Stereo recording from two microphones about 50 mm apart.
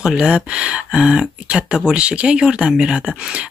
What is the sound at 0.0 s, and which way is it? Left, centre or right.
Speech, centre.